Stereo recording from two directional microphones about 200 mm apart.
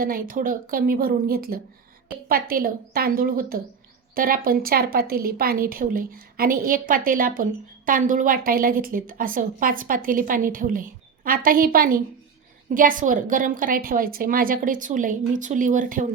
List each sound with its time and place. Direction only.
0.0 s a woman's voice: 45° right (ahead or behind)